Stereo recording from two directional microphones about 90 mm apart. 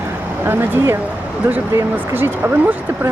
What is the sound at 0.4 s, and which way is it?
Speech, 25° right (ahead or behind).